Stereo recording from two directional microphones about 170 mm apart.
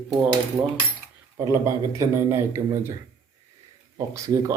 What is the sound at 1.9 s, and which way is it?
Speech, 15° right (ahead or behind).